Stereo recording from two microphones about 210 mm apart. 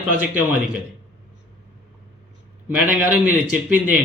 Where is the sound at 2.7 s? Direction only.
5° right (ahead or behind).